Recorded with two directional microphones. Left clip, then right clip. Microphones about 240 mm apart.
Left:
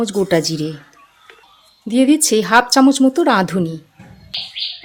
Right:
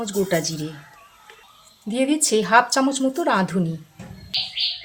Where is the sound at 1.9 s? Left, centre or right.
Left.